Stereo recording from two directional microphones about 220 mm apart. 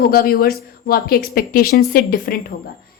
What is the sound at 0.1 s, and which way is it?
Speech, 40° left (ahead or behind).